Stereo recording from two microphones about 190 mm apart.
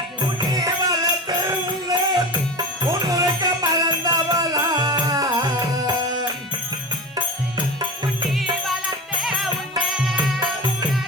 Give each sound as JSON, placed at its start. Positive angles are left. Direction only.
{"t": 0.2, "sound": "music", "side_deg": -20}
{"t": 7.5, "sound": "music", "side_deg": -25}
{"t": 10.0, "sound": "music", "side_deg": 0}